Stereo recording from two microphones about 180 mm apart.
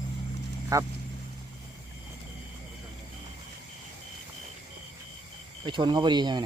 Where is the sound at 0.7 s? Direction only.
20° right (ahead or behind).